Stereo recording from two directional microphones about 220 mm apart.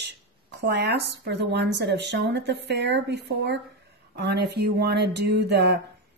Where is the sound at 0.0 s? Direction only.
50° right (ahead or behind).